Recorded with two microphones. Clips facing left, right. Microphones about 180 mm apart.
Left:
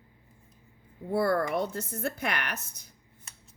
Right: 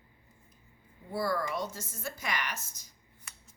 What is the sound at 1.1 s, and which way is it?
A woman's voice, 60° left (ahead or behind).